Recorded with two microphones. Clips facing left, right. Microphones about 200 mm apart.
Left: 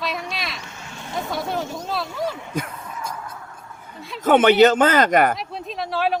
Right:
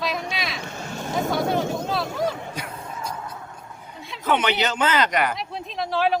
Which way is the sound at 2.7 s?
30° right (ahead or behind).